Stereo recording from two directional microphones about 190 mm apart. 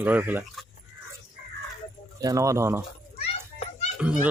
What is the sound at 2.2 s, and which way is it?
Speech, 15° right (ahead or behind).